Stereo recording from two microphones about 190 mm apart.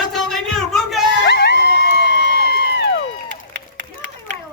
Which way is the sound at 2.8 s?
70° left (ahead or behind).